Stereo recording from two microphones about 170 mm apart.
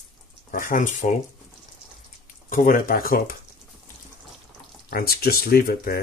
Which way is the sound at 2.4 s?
55° left (ahead or behind).